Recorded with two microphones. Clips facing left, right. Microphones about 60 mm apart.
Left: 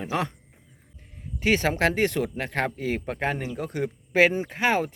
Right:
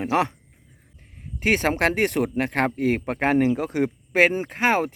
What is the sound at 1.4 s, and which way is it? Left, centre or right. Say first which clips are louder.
Speech: right 2 dB; right.